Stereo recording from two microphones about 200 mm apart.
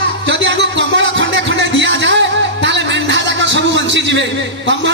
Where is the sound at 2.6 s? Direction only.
65° right (ahead or behind).